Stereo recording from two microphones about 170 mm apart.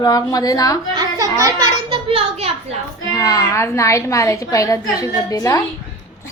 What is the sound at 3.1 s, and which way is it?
A woman's voice, 20° left (ahead or behind).